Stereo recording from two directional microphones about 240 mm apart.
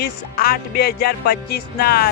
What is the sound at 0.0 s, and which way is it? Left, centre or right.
Speech, left.